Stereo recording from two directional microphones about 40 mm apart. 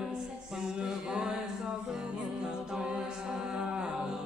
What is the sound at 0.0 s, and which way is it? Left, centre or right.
Music, centre.